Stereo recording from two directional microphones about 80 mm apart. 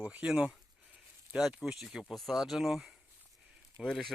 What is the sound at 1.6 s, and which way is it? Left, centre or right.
Speech, centre.